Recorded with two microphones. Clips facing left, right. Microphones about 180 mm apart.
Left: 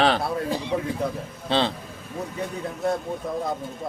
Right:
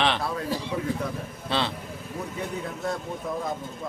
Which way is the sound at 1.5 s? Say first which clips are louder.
Left 5 dB; 30° left (ahead or behind).